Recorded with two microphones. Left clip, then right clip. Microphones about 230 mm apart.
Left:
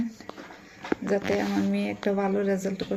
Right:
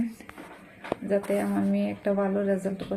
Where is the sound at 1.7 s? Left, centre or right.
Left.